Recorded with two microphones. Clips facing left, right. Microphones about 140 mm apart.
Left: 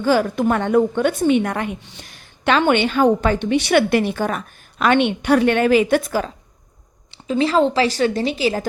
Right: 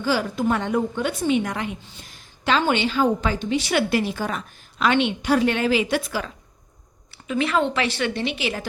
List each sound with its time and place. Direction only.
0.0 s a woman's voice: 50° left (ahead or behind)
7.1 s a woman's voice: 30° left (ahead or behind)